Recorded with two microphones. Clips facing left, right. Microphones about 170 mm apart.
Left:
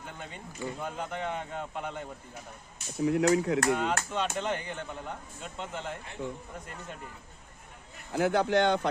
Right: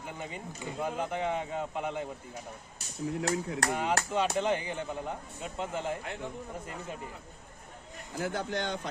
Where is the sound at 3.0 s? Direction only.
75° left (ahead or behind).